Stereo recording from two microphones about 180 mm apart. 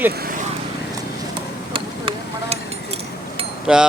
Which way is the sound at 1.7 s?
30° right (ahead or behind).